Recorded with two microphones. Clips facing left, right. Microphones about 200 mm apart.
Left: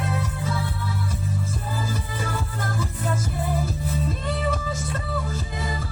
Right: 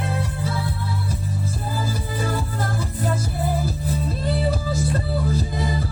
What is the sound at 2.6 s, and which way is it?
Music, 35° right (ahead or behind).